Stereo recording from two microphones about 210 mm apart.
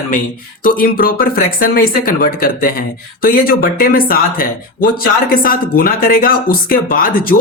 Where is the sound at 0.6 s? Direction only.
40° left (ahead or behind).